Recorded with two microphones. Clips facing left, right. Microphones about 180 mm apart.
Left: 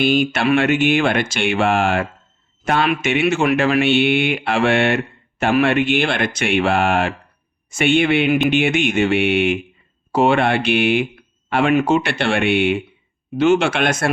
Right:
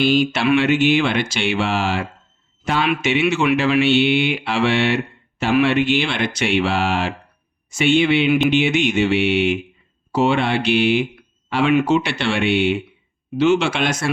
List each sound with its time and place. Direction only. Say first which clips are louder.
0.0 s speech: even; 50° left (ahead or behind)